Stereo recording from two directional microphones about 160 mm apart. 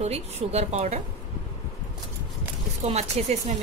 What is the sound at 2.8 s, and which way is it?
Speech, 40° right (ahead or behind).